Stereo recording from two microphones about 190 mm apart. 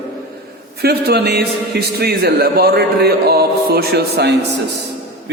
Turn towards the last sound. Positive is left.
turn(degrees=-60)  # may be behind; listen again after turning